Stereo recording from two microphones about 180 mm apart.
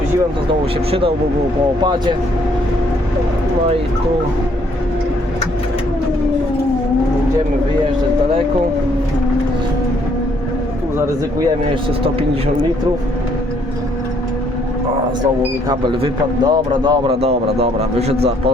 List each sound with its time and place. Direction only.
0.4 s a man's voice: 30° right (ahead or behind)
15.7 s a man's voice: 25° right (ahead or behind)